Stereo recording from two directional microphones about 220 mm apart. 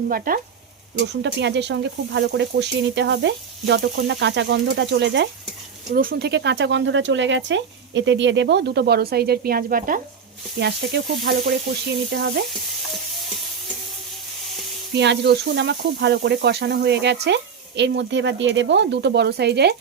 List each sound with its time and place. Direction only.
0.3 s speech: 40° right (ahead or behind)
0.9 s speech: 50° right (ahead or behind)
14.9 s speech: 50° right (ahead or behind)